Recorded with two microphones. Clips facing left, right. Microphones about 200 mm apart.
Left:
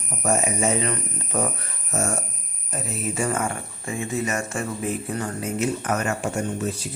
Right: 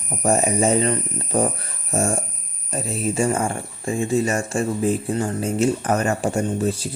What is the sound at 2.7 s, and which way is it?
Speech, 30° right (ahead or behind).